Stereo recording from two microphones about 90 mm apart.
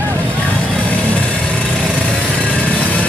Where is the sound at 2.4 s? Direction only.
15° left (ahead or behind).